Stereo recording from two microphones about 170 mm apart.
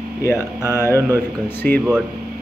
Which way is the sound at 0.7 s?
15° left (ahead or behind).